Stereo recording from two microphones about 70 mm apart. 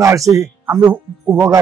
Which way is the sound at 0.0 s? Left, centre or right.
Right.